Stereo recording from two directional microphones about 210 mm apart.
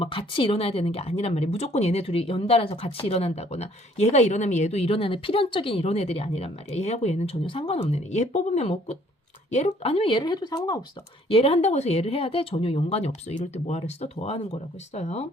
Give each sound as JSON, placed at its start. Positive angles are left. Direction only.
{"t": 0.0, "sound": "a woman's voice", "side_deg": 25}